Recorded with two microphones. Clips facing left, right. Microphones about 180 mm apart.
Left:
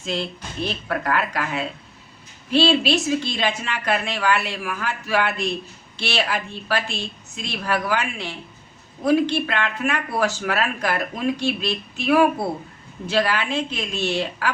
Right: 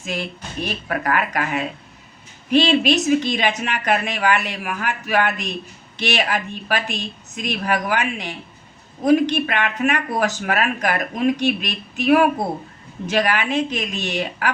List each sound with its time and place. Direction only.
0.0 s speech: 10° right (ahead or behind)